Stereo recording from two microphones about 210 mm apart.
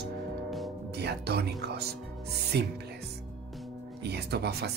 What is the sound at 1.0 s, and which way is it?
Speech, 50° right (ahead or behind).